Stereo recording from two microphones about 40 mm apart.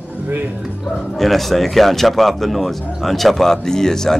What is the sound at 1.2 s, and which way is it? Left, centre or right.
Speech, centre.